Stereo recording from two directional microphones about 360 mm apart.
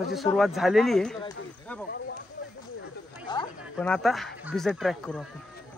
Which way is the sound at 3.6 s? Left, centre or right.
Centre.